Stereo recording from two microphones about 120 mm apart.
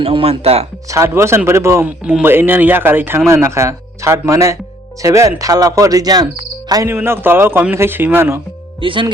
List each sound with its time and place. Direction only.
0.0 s speech: 50° right (ahead or behind)
0.9 s speech: 25° right (ahead or behind)
6.8 s speech: 20° right (ahead or behind)
8.8 s speech: 45° right (ahead or behind)